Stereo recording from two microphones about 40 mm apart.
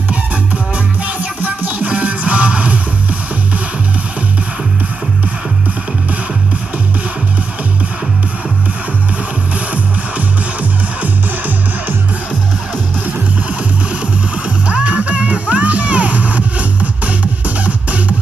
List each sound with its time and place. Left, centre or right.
1.0 s music: right
10.1 s music: right
14.7 s music: right